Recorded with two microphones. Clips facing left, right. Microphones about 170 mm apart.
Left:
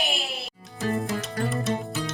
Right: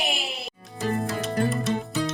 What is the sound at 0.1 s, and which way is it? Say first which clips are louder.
Music: even; 20° right (ahead or behind).